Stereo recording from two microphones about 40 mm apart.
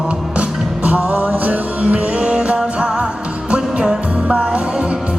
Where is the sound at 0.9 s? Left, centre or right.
Right.